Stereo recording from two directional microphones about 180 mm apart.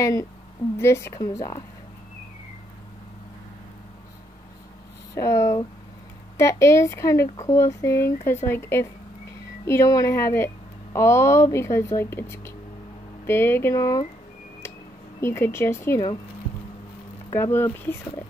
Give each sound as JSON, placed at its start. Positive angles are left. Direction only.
{"t": 0.0, "sound": "speech", "side_deg": 20}
{"t": 5.1, "sound": "speech", "side_deg": 15}
{"t": 15.1, "sound": "speech", "side_deg": 15}
{"t": 17.3, "sound": "speech", "side_deg": 15}